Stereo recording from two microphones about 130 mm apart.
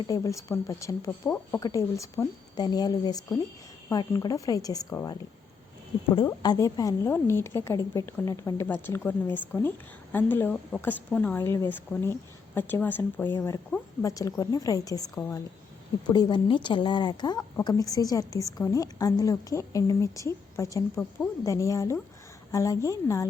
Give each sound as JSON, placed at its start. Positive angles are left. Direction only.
{"t": 0.1, "sound": "a woman's voice", "side_deg": 25}
{"t": 6.4, "sound": "a woman's voice", "side_deg": 30}
{"t": 14.0, "sound": "a woman's voice", "side_deg": 25}